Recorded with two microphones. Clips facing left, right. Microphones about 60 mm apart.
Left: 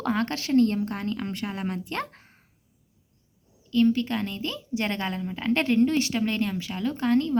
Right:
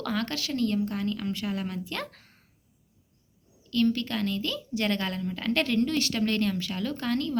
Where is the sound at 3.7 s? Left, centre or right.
Centre.